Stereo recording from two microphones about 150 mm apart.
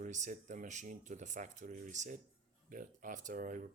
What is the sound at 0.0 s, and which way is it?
Speech, 55° right (ahead or behind).